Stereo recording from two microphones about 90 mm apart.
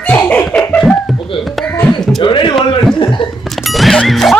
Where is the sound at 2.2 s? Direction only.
65° left (ahead or behind).